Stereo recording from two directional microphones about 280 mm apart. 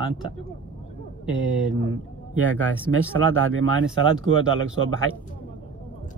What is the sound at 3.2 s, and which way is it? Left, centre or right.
A man's voice, right.